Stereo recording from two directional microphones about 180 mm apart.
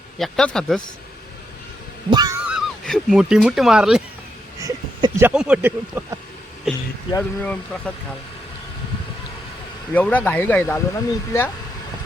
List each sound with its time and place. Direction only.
0.2 s speech: 5° left (ahead or behind)
2.0 s a sound: 20° right (ahead or behind)
2.4 s speech: 5° right (ahead or behind)
4.6 s a sound: 20° right (ahead or behind)
5.2 s speech: 5° right (ahead or behind)
7.4 s speech: 5° left (ahead or behind)
9.9 s speech: 10° left (ahead or behind)